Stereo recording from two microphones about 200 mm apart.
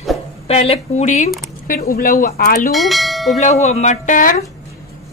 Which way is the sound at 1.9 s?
45° left (ahead or behind).